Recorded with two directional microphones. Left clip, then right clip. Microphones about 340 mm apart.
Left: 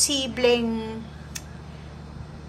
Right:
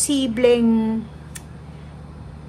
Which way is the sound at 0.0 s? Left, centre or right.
Centre.